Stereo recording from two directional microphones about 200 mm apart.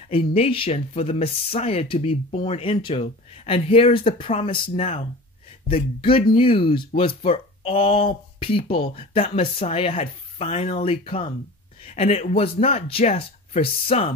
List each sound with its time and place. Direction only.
0.1 s speech: 30° left (ahead or behind)